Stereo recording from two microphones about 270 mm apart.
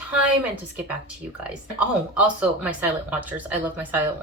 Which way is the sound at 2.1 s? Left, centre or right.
Centre.